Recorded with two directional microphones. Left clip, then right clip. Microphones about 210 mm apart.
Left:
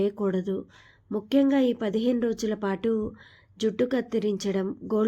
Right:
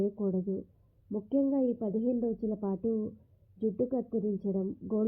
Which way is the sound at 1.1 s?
45° left (ahead or behind).